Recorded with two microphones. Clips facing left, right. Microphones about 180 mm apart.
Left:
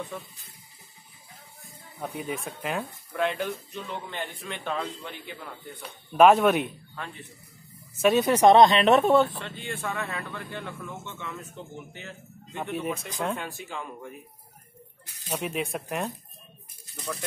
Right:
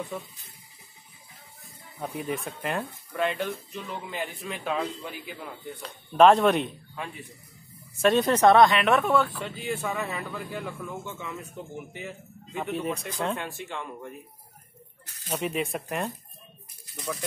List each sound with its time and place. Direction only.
2.0 s speech: centre (ahead or behind)
5.8 s speech: 5° left (ahead or behind)
8.0 s speech: 5° left (ahead or behind); by 9.4 s 25° left (ahead or behind)
9.4 s speech: 5° right (ahead or behind)
15.3 s speech: centre (ahead or behind)